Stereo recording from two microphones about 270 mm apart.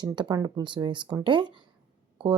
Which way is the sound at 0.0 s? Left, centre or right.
Centre.